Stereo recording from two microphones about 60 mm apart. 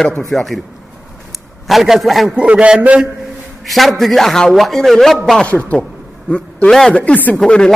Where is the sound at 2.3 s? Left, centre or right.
Centre.